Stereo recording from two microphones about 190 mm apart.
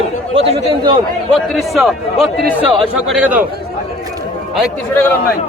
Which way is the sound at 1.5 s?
Centre (ahead or behind).